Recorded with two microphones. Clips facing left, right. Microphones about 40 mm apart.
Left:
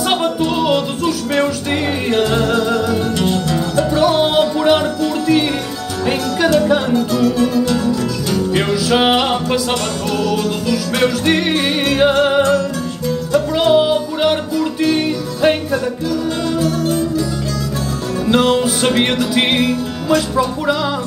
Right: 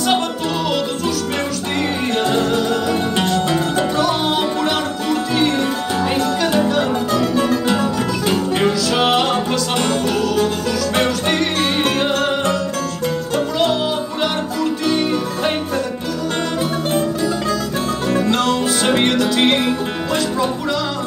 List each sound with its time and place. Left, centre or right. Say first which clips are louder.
0.1 s music: left 3 dB; centre
3.4 s music: left 1 dB; right
7.7 s music: left 1 dB; right
8.8 s music: left 2 dB; centre
11.3 s music: left 2 dB; centre
13.6 s music: left 6 dB; centre
18.3 s music: left 3 dB; centre